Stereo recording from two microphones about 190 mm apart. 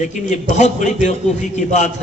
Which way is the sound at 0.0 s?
40° left (ahead or behind).